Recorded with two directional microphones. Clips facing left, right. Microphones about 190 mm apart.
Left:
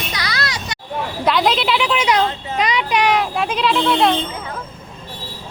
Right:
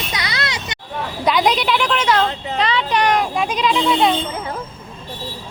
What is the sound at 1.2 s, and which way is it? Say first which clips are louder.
A woman's voice: even; centre (ahead or behind).